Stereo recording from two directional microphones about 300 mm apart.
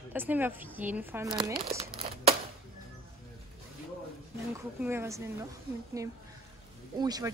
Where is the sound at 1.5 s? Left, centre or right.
Centre.